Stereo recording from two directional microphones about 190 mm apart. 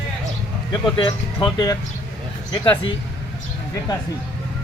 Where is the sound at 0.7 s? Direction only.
25° left (ahead or behind).